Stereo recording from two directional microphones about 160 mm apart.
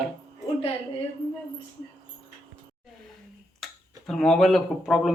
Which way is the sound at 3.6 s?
5° left (ahead or behind).